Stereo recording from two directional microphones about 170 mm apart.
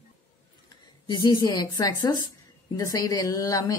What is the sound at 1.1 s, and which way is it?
A woman's voice, 25° left (ahead or behind).